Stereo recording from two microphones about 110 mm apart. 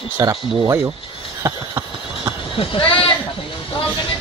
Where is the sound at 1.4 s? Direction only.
25° right (ahead or behind).